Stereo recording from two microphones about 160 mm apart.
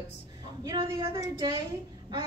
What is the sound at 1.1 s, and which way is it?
Speech, 30° right (ahead or behind).